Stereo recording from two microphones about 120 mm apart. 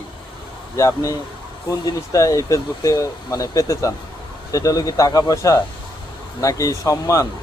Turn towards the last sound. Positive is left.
turn(degrees=25)  # may be behind; listen again after turning